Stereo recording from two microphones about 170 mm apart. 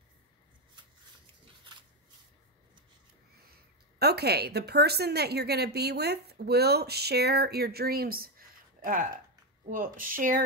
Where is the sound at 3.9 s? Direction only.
70° right (ahead or behind).